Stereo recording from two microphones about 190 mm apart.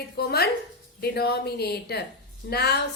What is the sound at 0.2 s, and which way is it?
A woman's voice, 55° left (ahead or behind).